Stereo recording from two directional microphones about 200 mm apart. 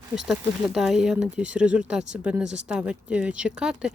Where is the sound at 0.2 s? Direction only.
Centre (ahead or behind).